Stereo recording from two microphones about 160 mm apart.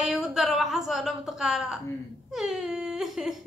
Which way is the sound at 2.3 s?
Centre (ahead or behind).